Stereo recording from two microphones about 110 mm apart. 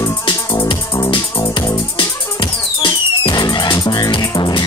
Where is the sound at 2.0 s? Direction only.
50° left (ahead or behind).